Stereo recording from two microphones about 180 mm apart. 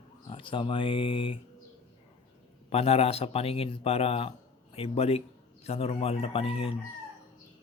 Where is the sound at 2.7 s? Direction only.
35° left (ahead or behind).